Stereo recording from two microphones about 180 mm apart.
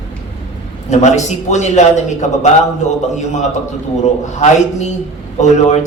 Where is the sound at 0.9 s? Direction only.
40° left (ahead or behind).